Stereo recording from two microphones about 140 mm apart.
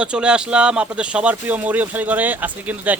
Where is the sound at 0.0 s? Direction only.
5° right (ahead or behind).